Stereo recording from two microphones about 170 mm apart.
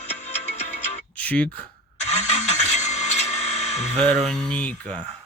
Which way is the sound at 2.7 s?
45° left (ahead or behind).